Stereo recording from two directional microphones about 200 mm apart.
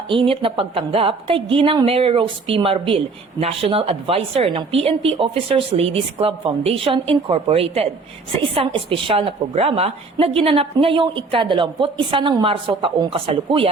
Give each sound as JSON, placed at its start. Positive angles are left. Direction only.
{"t": 0.1, "sound": "a woman's voice", "side_deg": -25}